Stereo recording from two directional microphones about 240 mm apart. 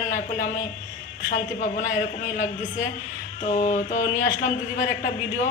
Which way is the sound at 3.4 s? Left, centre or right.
Left.